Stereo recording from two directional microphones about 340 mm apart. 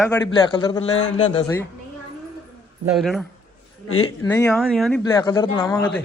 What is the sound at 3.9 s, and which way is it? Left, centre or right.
Speech, left.